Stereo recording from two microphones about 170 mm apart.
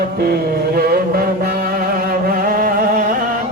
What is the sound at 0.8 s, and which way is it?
Music, 60° right (ahead or behind).